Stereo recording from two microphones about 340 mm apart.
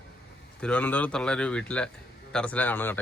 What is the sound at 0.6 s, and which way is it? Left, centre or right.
A man's voice, centre.